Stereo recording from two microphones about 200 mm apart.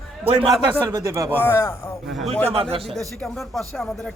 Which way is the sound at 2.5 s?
30° right (ahead or behind).